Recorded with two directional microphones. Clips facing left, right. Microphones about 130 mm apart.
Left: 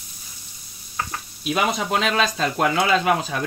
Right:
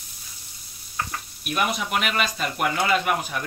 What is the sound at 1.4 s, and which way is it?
Speech, 90° left.